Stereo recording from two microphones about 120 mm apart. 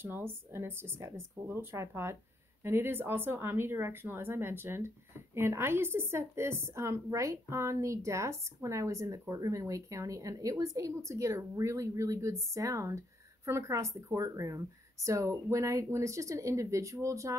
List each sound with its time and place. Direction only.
0.0 s speech: 20° right (ahead or behind)